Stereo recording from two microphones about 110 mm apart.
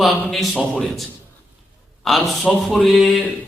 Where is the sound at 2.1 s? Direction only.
Centre (ahead or behind).